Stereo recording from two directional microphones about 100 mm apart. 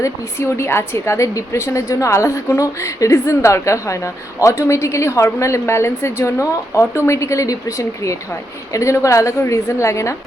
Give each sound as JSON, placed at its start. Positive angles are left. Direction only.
{"t": 0.0, "sound": "a woman's voice", "side_deg": 30}